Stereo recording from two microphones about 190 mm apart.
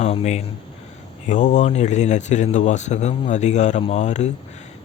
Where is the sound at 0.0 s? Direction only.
35° left (ahead or behind).